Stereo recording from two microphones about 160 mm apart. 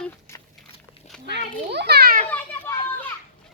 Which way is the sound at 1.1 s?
5° left (ahead or behind).